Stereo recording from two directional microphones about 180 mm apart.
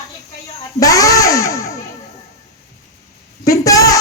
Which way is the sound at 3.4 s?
20° left (ahead or behind).